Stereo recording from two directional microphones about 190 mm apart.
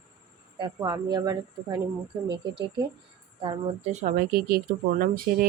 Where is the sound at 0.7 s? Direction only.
20° right (ahead or behind).